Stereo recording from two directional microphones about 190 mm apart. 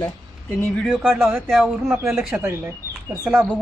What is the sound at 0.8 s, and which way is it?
Speech, centre (ahead or behind).